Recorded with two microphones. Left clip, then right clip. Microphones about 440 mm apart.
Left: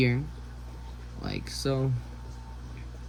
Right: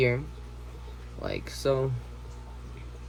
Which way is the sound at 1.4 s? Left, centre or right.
Centre.